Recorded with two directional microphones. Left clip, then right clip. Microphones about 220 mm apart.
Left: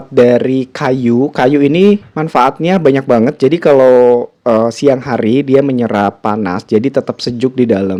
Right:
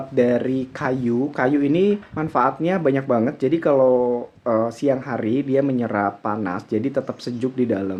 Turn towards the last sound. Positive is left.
turn(degrees=45)  # may be behind; listen again after turning